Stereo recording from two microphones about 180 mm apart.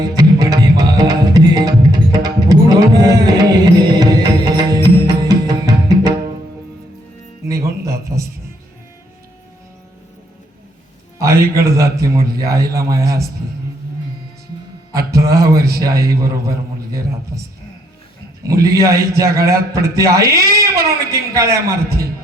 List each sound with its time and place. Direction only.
0.1 s music: 20° right (ahead or behind)
7.4 s music: 20° right (ahead or behind)
11.2 s a man's voice: 15° right (ahead or behind)
14.9 s a man's voice: 20° right (ahead or behind)
18.4 s a man's voice: 20° right (ahead or behind)